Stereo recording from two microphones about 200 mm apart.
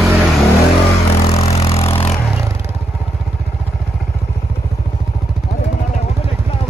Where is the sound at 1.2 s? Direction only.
30° left (ahead or behind).